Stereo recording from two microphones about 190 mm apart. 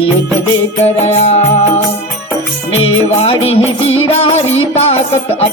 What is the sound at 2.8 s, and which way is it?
Music, 30° left (ahead or behind).